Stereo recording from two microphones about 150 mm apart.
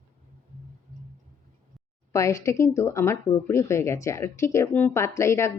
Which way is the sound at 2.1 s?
20° left (ahead or behind).